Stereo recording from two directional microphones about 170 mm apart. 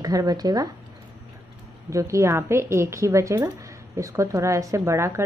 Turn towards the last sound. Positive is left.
turn(degrees=-15)  # may be behind; listen again after turning